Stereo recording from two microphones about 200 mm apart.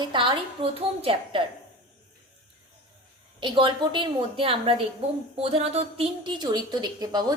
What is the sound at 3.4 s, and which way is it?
A woman's voice, 25° right (ahead or behind).